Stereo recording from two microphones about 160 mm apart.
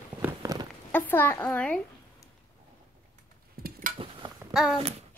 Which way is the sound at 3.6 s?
70° right (ahead or behind).